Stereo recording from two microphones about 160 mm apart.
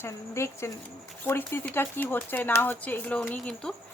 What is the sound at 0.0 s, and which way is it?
Speech, 15° left (ahead or behind).